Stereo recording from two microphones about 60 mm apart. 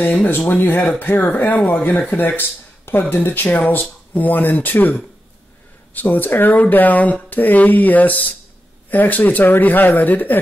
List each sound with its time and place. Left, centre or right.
0.3 s speech: left
5.9 s speech: left